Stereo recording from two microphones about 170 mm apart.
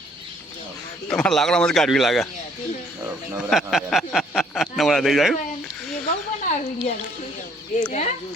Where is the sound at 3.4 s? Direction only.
Centre (ahead or behind).